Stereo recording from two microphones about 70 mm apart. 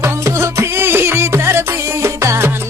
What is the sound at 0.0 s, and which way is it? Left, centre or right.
Music, right.